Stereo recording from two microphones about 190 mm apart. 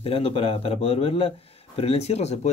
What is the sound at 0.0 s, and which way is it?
A man's voice, 30° left (ahead or behind).